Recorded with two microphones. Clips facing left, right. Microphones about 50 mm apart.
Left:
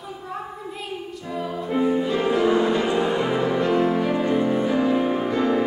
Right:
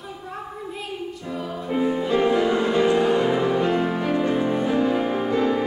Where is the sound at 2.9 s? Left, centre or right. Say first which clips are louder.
Right 3 dB; left.